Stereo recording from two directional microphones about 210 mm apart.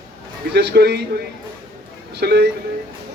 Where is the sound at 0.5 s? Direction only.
50° right (ahead or behind).